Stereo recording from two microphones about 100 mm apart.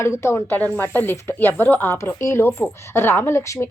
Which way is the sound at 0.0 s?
30° left (ahead or behind).